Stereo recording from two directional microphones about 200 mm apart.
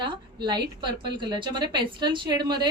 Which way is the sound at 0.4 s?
20° right (ahead or behind).